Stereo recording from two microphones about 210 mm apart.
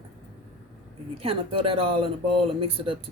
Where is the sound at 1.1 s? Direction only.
25° right (ahead or behind).